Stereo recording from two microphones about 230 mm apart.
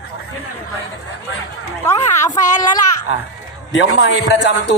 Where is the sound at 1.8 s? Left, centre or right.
Centre.